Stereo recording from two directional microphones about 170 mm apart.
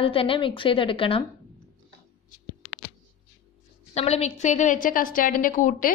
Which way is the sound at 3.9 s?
40° left (ahead or behind).